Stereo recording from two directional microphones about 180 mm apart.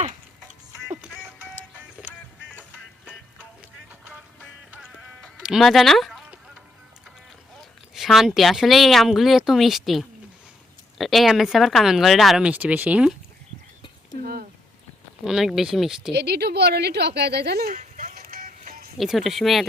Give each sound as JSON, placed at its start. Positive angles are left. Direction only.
{"t": 0.9, "sound": "music", "side_deg": -5}
{"t": 2.0, "sound": "music", "side_deg": 10}
{"t": 5.2, "sound": "music", "side_deg": 0}
{"t": 7.6, "sound": "speech", "side_deg": 0}
{"t": 14.2, "sound": "a sound", "side_deg": -55}
{"t": 15.2, "sound": "speech", "side_deg": -5}
{"t": 16.1, "sound": "a woman's voice", "side_deg": -65}
{"t": 17.7, "sound": "music", "side_deg": -45}
{"t": 18.9, "sound": "speech", "side_deg": 0}